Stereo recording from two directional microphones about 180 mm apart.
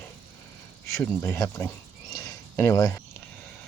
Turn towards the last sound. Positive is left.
turn(degrees=15)  # may be behind; listen again after turning